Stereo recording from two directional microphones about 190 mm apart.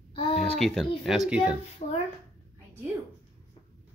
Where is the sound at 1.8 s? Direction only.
40° left (ahead or behind).